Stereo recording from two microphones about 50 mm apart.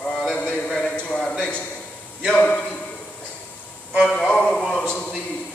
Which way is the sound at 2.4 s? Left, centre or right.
Left.